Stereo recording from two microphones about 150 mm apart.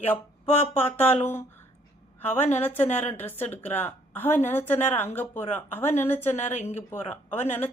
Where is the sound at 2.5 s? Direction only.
15° left (ahead or behind).